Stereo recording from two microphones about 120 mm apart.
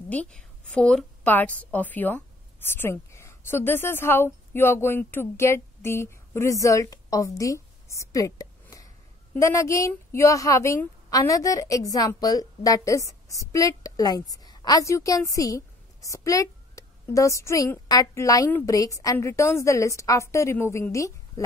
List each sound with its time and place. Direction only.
0.1 s a woman's voice: 10° left (ahead or behind); by 21.1 s 25° left (ahead or behind)